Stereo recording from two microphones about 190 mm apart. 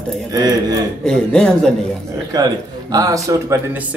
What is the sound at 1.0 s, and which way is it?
Speech, 5° left (ahead or behind).